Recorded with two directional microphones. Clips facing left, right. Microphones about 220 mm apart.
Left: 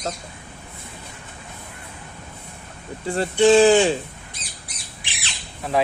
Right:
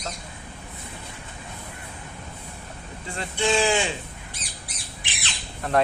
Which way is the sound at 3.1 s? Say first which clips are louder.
Left 10 dB; 35° left (ahead or behind).